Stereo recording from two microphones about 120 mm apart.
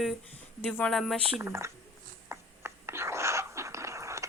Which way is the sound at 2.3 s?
20° right (ahead or behind).